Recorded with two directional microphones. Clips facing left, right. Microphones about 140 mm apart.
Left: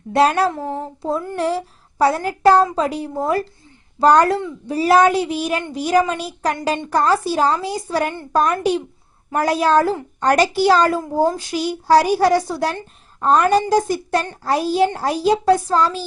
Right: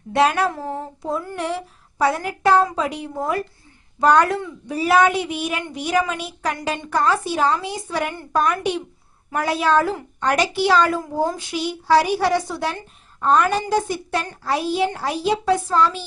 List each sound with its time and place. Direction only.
0.1 s a child's voice: 35° left (ahead or behind)